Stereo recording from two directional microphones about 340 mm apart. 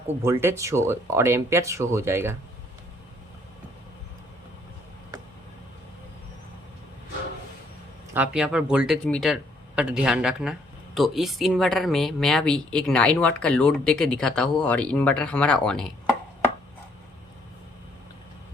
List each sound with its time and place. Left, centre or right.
0.2 s speech: centre
8.1 s speech: centre